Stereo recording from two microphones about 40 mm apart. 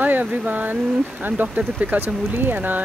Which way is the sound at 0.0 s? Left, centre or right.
Right.